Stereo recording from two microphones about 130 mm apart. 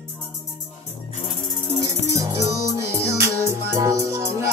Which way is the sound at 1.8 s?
25° right (ahead or behind).